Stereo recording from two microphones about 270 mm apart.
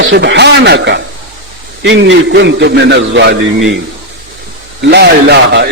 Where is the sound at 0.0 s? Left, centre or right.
Right.